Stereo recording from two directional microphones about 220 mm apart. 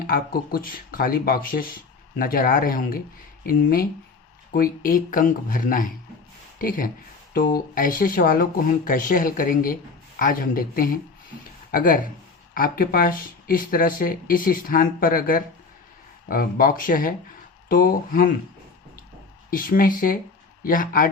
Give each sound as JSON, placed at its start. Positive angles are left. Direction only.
{"t": 0.1, "sound": "speech", "side_deg": 40}
{"t": 19.5, "sound": "speech", "side_deg": 40}